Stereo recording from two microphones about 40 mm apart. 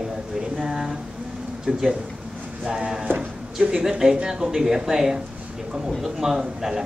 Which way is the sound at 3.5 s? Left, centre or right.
Centre.